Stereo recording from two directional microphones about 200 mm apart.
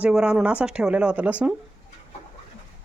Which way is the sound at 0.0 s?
5° right (ahead or behind).